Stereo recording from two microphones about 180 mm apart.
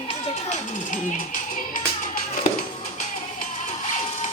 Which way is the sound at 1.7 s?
50° left (ahead or behind).